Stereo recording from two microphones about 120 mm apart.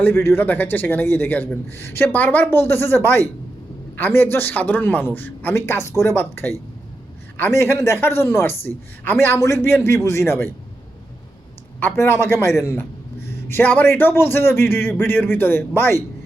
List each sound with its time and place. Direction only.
0.0 s a man's voice: 20° left (ahead or behind)
11.8 s a man's voice: 20° left (ahead or behind)